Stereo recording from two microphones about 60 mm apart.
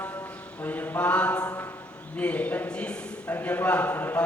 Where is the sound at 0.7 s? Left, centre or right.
Left.